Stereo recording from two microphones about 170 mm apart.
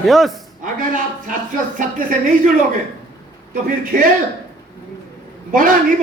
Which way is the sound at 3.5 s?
55° right (ahead or behind).